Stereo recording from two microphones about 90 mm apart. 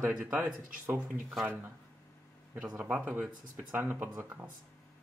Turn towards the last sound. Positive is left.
turn(degrees=-20)  # may be behind; listen again after turning